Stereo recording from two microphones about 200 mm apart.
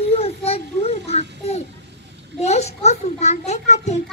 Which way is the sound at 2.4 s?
35° left (ahead or behind).